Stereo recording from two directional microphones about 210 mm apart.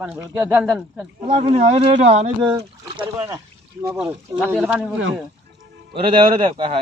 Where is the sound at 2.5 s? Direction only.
20° right (ahead or behind).